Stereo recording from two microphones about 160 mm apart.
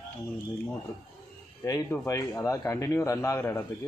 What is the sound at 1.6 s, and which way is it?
A man's voice, 20° left (ahead or behind).